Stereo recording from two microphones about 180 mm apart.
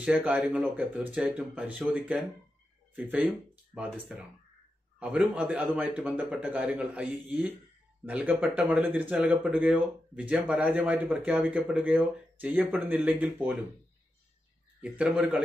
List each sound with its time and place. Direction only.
0.0 s speech: 5° right (ahead or behind)
3.7 s speech: 5° right (ahead or behind)
14.8 s speech: 5° right (ahead or behind)